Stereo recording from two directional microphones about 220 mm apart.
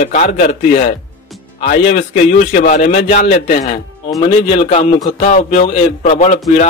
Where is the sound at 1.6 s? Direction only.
35° left (ahead or behind).